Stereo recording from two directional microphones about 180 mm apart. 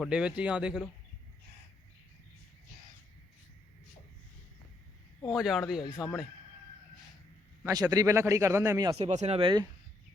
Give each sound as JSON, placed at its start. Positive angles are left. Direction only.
{"t": 0.0, "sound": "a man's voice", "side_deg": -5}
{"t": 5.3, "sound": "a man's voice", "side_deg": 0}
{"t": 5.8, "sound": "speech", "side_deg": 25}
{"t": 7.6, "sound": "a man's voice", "side_deg": -20}
{"t": 9.0, "sound": "speech", "side_deg": -35}